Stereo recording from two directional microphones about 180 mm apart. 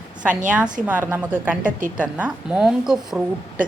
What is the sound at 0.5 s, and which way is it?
A woman's voice, 5° right (ahead or behind).